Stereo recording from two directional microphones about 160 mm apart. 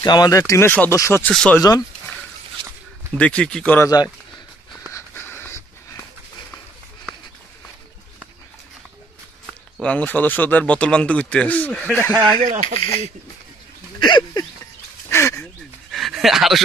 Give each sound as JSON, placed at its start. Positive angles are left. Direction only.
{"t": 0.0, "sound": "speech", "side_deg": 25}
{"t": 1.3, "sound": "speech", "side_deg": 5}
{"t": 3.2, "sound": "a man's voice", "side_deg": 5}
{"t": 4.9, "sound": "a sound", "side_deg": 15}
{"t": 9.8, "sound": "a man's voice", "side_deg": 10}
{"t": 12.4, "sound": "speech", "side_deg": -55}
{"t": 14.0, "sound": "speech", "side_deg": 30}
{"t": 15.0, "sound": "a sound", "side_deg": 15}
{"t": 15.9, "sound": "a sound", "side_deg": 0}